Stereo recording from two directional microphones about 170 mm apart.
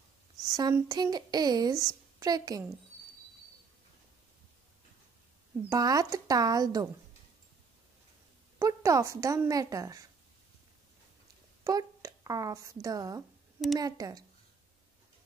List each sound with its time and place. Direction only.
0.4 s a woman's voice: 20° right (ahead or behind)
5.7 s a woman's voice: 20° right (ahead or behind)
8.5 s a woman's voice: 20° right (ahead or behind)
11.6 s a woman's voice: 20° right (ahead or behind)